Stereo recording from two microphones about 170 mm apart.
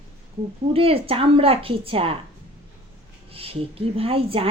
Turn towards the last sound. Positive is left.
turn(degrees=-35)  # may be behind; listen again after turning